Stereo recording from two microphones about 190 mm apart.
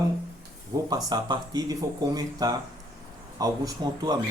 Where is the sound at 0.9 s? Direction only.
20° right (ahead or behind).